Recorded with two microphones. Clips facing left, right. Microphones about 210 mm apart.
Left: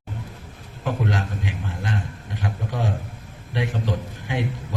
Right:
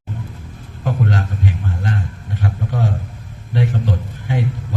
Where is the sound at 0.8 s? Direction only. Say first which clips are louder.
Right 4 dB; 45° right (ahead or behind).